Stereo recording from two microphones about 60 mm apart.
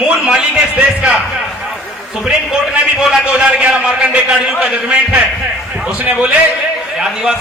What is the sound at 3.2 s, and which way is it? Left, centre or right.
Speech, right.